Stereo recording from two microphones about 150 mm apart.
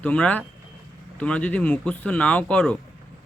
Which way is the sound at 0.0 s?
10° left (ahead or behind).